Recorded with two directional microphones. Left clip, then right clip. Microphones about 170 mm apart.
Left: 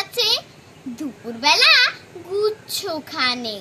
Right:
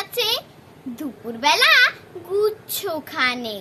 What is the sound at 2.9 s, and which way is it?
Child singing, 10° right (ahead or behind).